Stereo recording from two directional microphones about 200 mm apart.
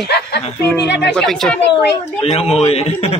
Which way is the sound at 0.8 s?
60° left (ahead or behind).